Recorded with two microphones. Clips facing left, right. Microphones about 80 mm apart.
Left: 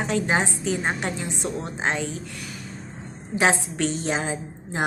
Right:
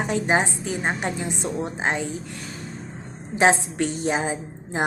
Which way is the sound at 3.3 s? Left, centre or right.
Right.